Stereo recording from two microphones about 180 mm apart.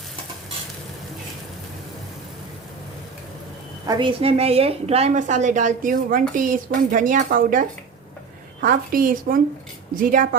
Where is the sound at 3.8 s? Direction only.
25° right (ahead or behind).